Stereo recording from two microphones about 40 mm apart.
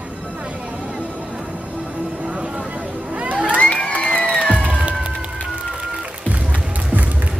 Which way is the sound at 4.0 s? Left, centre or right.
Left.